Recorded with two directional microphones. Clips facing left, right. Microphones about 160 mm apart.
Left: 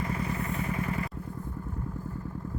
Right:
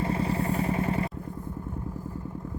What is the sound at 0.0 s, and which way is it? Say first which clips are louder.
Vehicle: right 5 dB; 30° right (ahead or behind).